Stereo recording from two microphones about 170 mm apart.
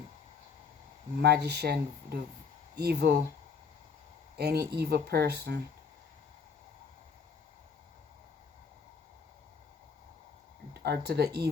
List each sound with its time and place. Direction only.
1.2 s speech: 70° right (ahead or behind)
4.4 s speech: 70° right (ahead or behind)
10.8 s speech: 70° right (ahead or behind)